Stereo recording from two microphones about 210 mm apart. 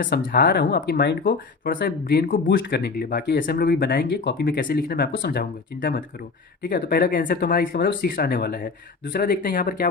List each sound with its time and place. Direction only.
0.3 s speech: 45° left (ahead or behind)